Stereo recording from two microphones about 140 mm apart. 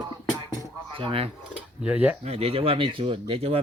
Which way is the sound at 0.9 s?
40° right (ahead or behind).